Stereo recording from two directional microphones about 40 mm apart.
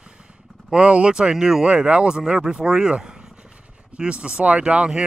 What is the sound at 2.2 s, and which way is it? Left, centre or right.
Speech, centre.